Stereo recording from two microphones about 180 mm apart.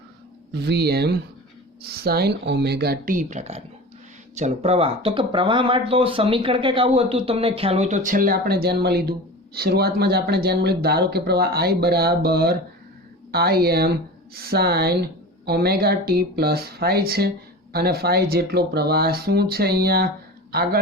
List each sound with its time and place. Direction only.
0.6 s speech: 65° right (ahead or behind)